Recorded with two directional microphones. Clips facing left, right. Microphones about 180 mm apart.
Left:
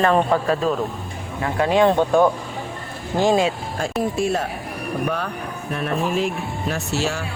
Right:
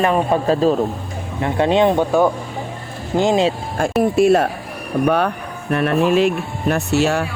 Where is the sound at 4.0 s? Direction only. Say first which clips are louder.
Right 9 dB; 65° right (ahead or behind).